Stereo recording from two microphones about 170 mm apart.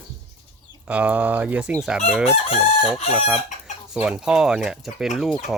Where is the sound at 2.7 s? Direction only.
40° left (ahead or behind).